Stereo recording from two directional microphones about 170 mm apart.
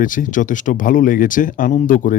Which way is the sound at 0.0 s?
50° left (ahead or behind).